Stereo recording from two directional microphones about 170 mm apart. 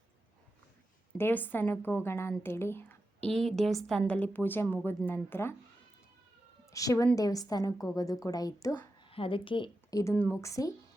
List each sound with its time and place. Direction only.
1.2 s a woman's voice: 10° left (ahead or behind)
6.7 s a woman's voice: 20° left (ahead or behind)
9.0 s a woman's voice: 30° left (ahead or behind)
10.0 s a woman's voice: 15° left (ahead or behind)